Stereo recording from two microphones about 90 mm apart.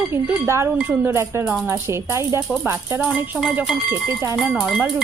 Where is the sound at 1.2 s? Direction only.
30° right (ahead or behind).